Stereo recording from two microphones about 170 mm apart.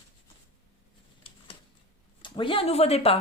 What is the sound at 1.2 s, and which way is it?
Typing, 30° left (ahead or behind).